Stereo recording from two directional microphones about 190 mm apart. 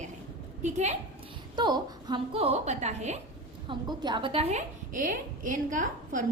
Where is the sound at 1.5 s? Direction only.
20° right (ahead or behind).